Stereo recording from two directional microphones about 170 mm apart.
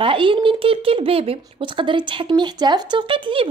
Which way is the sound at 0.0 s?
30° right (ahead or behind).